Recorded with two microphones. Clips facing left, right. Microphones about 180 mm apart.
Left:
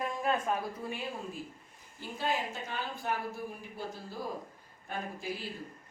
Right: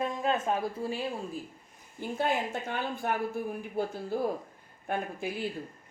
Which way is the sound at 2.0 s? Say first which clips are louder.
Right 4 dB; 55° right (ahead or behind).